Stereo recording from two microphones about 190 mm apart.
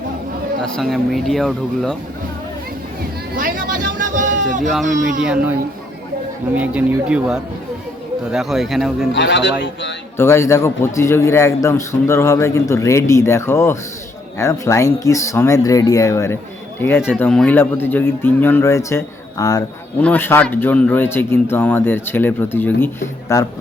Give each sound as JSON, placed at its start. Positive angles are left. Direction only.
{"t": 0.6, "sound": "speech", "side_deg": 0}
{"t": 3.3, "sound": "a sound", "side_deg": -45}
{"t": 4.9, "sound": "speech", "side_deg": -45}
{"t": 5.2, "sound": "speech", "side_deg": -5}
{"t": 9.1, "sound": "speech", "side_deg": 70}
{"t": 10.2, "sound": "a man's voice", "side_deg": 15}